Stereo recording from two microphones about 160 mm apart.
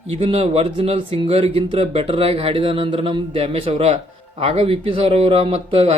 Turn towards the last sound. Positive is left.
turn(degrees=-35)  # may be behind; listen again after turning